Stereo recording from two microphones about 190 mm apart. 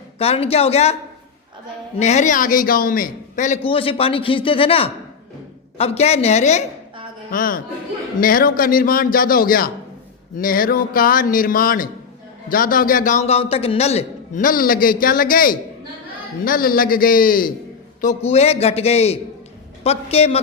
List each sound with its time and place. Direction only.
0.2 s a man's voice: 30° left (ahead or behind)
2.0 s a man's voice: 35° left (ahead or behind)
7.3 s a man's voice: 45° left (ahead or behind)
18.3 s a man's voice: 35° left (ahead or behind)